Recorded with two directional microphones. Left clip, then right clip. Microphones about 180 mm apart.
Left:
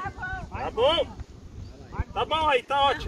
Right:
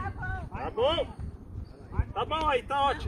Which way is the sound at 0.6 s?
50° right (ahead or behind).